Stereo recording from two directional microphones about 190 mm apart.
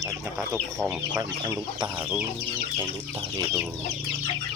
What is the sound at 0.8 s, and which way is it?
Speech, 15° right (ahead or behind).